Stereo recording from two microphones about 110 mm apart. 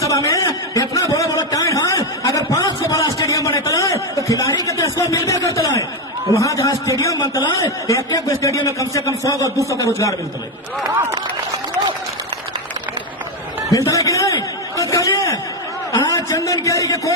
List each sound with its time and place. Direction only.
0.0 s chuckle: 30° left (ahead or behind)
3.2 s a sound: 30° left (ahead or behind)
6.3 s a man's voice: 30° left (ahead or behind)
7.2 s a man's voice: 45° left (ahead or behind)
7.9 s a man's voice: 30° left (ahead or behind)
13.7 s a sound: 30° left (ahead or behind)